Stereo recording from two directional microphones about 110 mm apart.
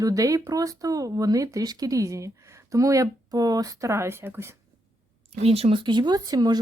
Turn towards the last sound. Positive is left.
turn(degrees=-35)  # may be behind; listen again after turning